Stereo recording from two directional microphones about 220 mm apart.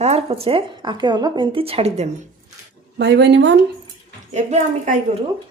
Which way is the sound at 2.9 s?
50° right (ahead or behind).